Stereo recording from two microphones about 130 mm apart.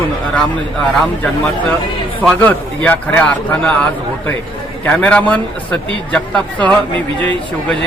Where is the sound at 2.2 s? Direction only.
10° left (ahead or behind).